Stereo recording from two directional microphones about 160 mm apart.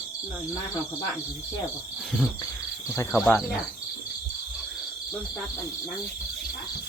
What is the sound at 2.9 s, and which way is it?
Speech, 15° left (ahead or behind).